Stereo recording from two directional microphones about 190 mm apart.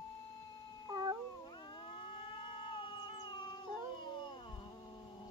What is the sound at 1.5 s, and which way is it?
Cat, 25° left (ahead or behind).